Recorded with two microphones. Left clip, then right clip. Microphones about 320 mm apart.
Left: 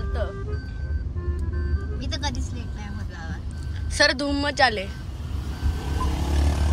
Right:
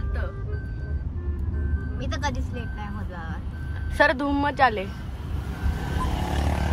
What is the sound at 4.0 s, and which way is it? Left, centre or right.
Speech, centre.